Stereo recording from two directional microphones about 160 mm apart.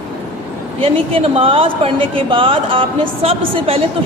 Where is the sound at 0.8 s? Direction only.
35° right (ahead or behind).